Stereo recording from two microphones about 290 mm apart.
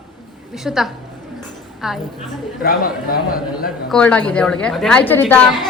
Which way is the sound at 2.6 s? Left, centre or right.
Left.